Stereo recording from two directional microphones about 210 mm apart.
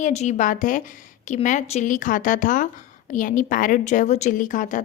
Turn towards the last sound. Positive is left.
turn(degrees=40)  # may be behind; listen again after turning